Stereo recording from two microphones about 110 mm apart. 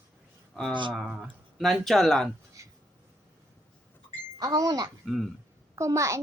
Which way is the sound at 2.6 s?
30° right (ahead or behind).